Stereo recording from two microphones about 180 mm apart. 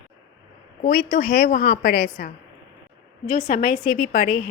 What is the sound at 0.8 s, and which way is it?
A woman's voice, 55° left (ahead or behind).